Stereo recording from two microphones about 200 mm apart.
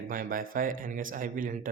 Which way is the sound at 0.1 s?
45° right (ahead or behind).